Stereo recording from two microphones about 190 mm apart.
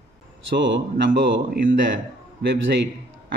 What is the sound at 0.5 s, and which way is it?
Speech, 70° right (ahead or behind).